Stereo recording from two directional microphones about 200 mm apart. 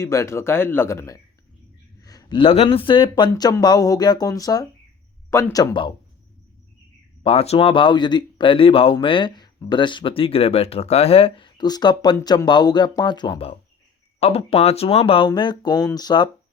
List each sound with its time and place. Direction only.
0.0 s speech: 15° left (ahead or behind)
7.2 s speech: 30° left (ahead or behind)